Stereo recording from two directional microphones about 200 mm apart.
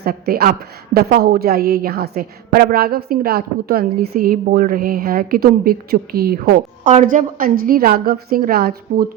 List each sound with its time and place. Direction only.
0.0 s a woman's voice: 50° right (ahead or behind)